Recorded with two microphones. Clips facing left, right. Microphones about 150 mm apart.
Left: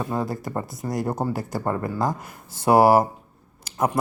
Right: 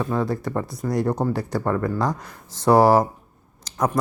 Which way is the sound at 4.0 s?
25° left (ahead or behind).